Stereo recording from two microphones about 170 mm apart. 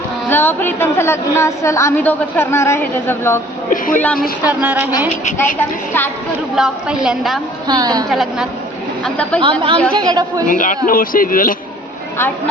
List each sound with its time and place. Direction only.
0.3 s a woman's voice: 10° left (ahead or behind)
3.7 s a man's voice: 50° left (ahead or behind)
4.0 s a woman's voice: 5° left (ahead or behind)
4.4 s speech: 10° right (ahead or behind)
5.5 s a woman's voice: 10° left (ahead or behind)
6.6 s a woman's voice: 5° right (ahead or behind)
7.7 s a woman's voice: 20° right (ahead or behind)
8.1 s a woman's voice: centre (ahead or behind)
9.4 s a woman's voice: 30° right (ahead or behind)
10.5 s a man's voice: 50° left (ahead or behind)